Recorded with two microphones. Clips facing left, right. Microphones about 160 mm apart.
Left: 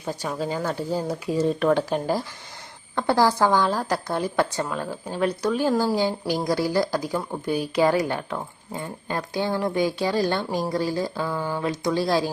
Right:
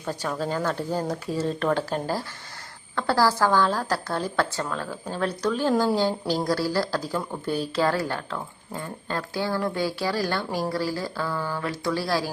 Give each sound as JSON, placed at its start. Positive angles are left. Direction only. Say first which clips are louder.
{"t": 0.0, "sound": "a woman's voice", "louder": "even", "side_deg": 10}